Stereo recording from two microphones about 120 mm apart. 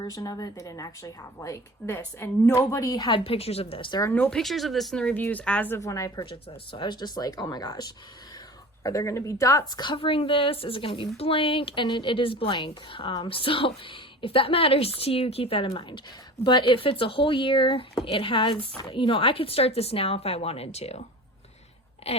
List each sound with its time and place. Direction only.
0.0 s a woman's voice: 30° left (ahead or behind)
2.6 s speech: 30° left (ahead or behind)
3.2 s speech: 55° left (ahead or behind)
4.1 s speech: 10° left (ahead or behind); by 6.1 s 25° left (ahead or behind)
6.7 s a woman's voice: 40° left (ahead or behind); by 21.0 s 60° left (ahead or behind)
22.0 s speech: 60° left (ahead or behind)